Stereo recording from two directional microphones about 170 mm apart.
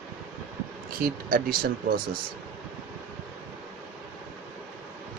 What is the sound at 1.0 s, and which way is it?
Speech, 60° right (ahead or behind).